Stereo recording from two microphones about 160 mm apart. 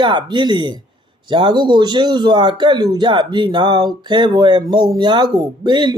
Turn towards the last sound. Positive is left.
turn(degrees=-25)  # may be behind; listen again after turning